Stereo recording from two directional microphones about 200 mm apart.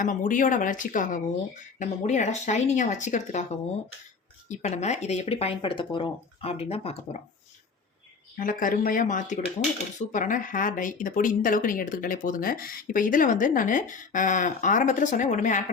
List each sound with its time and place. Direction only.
0.0 s speech: 40° left (ahead or behind)
8.4 s speech: 40° left (ahead or behind)